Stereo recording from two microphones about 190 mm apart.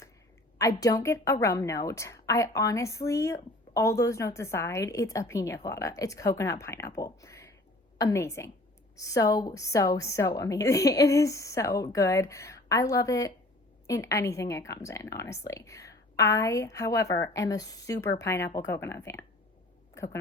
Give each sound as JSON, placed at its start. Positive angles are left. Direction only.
{"t": 0.6, "sound": "a woman's voice", "side_deg": 20}